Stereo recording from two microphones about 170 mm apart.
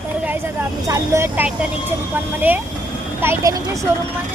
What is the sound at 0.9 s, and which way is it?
Speech, 20° right (ahead or behind).